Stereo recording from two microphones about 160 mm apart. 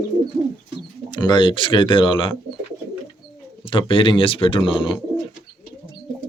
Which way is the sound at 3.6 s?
35° left (ahead or behind).